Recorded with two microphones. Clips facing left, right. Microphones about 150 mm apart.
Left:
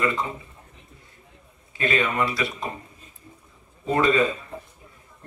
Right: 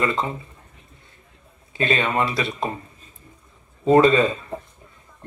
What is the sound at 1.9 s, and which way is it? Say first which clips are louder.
Speech: right 1 dB; 25° right (ahead or behind).